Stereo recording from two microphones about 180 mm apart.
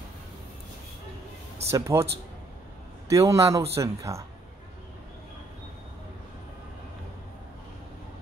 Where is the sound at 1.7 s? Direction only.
15° right (ahead or behind).